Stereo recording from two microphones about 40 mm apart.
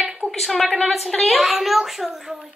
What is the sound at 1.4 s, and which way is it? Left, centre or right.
Speech, centre.